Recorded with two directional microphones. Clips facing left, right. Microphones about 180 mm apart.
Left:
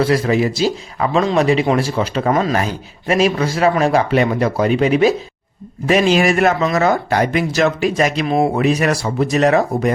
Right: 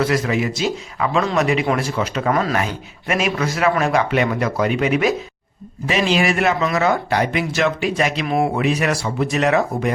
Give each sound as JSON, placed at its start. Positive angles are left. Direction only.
{"t": 0.0, "sound": "speech", "side_deg": 30}
{"t": 5.8, "sound": "speech", "side_deg": 45}